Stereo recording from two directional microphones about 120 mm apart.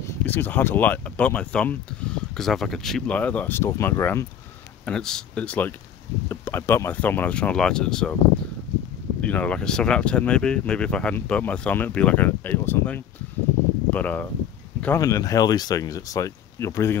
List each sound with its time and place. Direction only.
0.2 s speech: 15° left (ahead or behind)
4.8 s speech: 5° left (ahead or behind)
9.2 s speech: 10° left (ahead or behind)
15.0 s speech: 30° left (ahead or behind)